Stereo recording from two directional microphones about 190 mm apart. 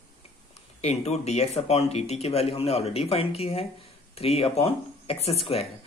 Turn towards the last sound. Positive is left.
turn(degrees=30)  # may be behind; listen again after turning